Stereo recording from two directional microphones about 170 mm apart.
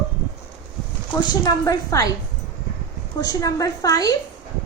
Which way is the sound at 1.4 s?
20° left (ahead or behind).